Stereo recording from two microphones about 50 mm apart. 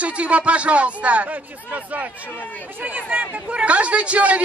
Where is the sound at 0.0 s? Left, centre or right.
Right.